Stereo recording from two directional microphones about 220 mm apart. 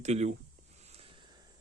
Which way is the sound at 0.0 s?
30° right (ahead or behind).